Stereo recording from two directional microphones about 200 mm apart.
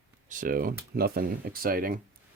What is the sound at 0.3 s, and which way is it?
Speech, 45° right (ahead or behind).